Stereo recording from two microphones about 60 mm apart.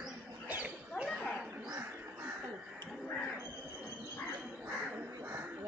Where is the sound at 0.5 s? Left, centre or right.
Right.